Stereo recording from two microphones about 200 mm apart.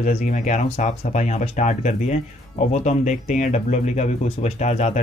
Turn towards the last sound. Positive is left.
turn(degrees=35)  # may be behind; listen again after turning